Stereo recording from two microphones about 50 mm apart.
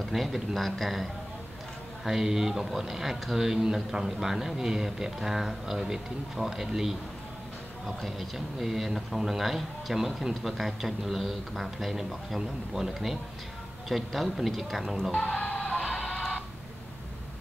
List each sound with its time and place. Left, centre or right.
0.0 s a man's voice: centre
15.1 s music: left